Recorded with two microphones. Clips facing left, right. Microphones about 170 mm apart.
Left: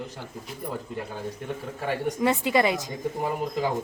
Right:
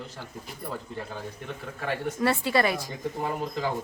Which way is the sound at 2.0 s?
15° left (ahead or behind).